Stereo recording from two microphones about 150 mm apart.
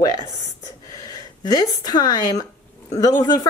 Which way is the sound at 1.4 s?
25° left (ahead or behind).